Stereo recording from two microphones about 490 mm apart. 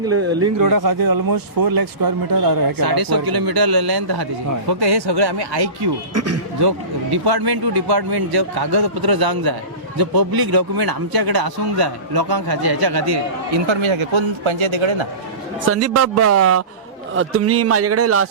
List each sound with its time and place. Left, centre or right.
0.6 s speech: right
6.1 s a man's voice: right
6.6 s speech: right
13.7 s speech: right
15.6 s a man's voice: right